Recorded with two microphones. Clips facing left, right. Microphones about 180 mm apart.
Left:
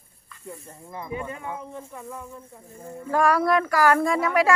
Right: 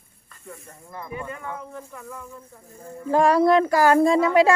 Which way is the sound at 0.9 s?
20° left (ahead or behind).